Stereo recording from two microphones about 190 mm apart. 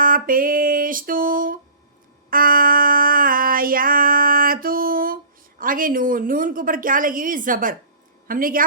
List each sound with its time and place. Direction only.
0.0 s music: 45° right (ahead or behind)
2.3 s child singing: 50° right (ahead or behind)
8.3 s music: 45° right (ahead or behind)